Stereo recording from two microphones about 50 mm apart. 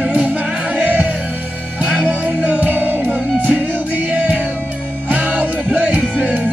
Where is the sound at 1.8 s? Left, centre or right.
Right.